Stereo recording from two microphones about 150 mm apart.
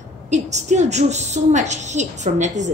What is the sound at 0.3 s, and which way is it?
A woman's voice, 50° right (ahead or behind).